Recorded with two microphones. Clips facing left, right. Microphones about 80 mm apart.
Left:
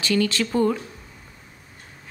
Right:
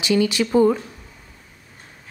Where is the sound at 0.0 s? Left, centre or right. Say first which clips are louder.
Right 3 dB; centre.